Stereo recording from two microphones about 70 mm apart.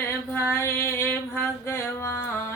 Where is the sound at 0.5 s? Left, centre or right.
Left.